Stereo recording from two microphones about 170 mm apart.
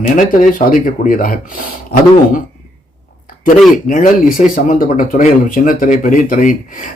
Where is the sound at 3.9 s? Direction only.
50° left (ahead or behind).